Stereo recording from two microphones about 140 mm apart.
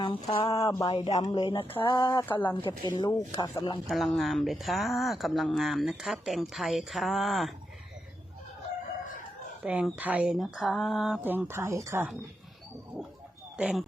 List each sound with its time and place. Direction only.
0.0 s speech: 40° left (ahead or behind)
0.5 s speech: 25° left (ahead or behind)
0.9 s speech: 35° left (ahead or behind)
2.0 s speech: 15° left (ahead or behind)
2.6 s speech: 35° left (ahead or behind)
3.8 s speech: centre (ahead or behind)
9.6 s speech: 10° right (ahead or behind)
11.2 s speech: 15° right (ahead or behind)
13.6 s speech: 5° right (ahead or behind)